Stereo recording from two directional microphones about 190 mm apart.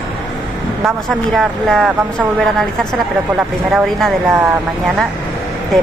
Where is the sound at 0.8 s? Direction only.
Centre (ahead or behind).